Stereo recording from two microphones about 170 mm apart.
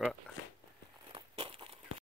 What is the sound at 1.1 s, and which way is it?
Crumpling, 30° right (ahead or behind).